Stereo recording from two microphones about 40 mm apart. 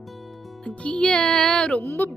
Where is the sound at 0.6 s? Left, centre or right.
Left.